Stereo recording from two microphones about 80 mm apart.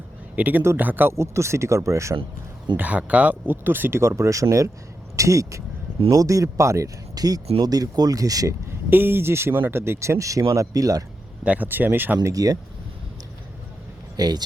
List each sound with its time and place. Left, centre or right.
0.3 s speech: right
1.1 s speech: right
2.7 s speech: centre; by 8.5 s right
8.9 s speech: right
11.4 s speech: right
12.2 s speech: right
14.2 s speech: right